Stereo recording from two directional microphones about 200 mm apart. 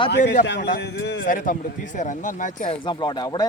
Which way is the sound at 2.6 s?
25° left (ahead or behind).